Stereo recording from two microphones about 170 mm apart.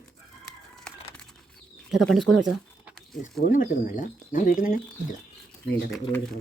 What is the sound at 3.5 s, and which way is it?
Speech, 50° left (ahead or behind).